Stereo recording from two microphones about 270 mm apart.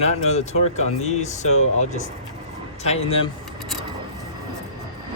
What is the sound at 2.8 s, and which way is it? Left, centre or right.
Speech, left.